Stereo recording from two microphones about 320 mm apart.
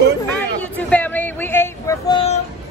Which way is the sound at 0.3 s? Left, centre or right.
Centre.